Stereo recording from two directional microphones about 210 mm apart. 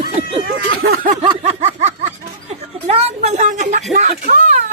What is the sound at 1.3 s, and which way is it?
A woman's voice, 35° right (ahead or behind).